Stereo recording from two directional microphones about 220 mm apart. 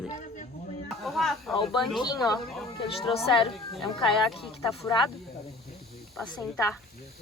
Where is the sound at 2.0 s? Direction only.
15° left (ahead or behind).